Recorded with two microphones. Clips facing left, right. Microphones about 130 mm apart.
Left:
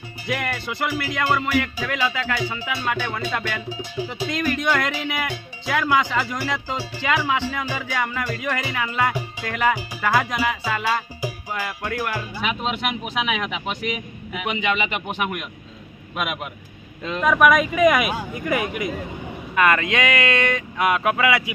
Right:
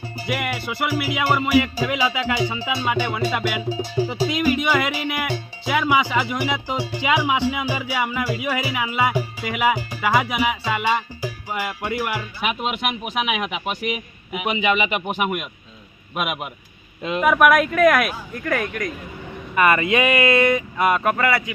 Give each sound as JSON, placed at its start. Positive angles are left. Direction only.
{"t": 0.3, "sound": "speech", "side_deg": -5}
{"t": 3.7, "sound": "music", "side_deg": -35}
{"t": 4.3, "sound": "speech", "side_deg": -10}
{"t": 19.5, "sound": "speech", "side_deg": -5}